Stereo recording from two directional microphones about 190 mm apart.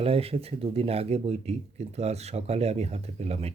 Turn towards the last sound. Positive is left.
turn(degrees=-30)  # may be behind; listen again after turning